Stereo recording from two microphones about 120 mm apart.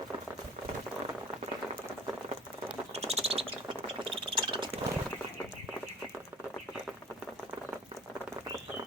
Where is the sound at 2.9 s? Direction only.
55° right (ahead or behind).